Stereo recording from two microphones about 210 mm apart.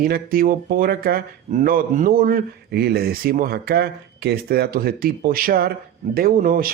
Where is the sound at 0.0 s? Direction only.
45° right (ahead or behind).